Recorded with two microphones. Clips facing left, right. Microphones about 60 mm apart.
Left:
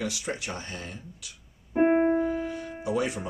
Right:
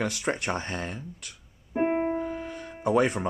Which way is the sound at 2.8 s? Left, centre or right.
Right.